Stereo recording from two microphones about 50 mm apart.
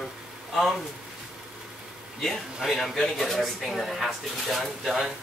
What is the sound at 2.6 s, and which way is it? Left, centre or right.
Speech, centre.